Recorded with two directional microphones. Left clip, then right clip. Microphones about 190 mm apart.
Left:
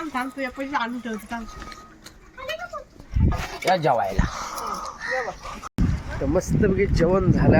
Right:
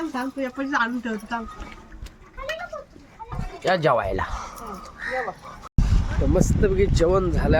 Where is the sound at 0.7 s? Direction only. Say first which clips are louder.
Right 5 dB; 45° right (ahead or behind).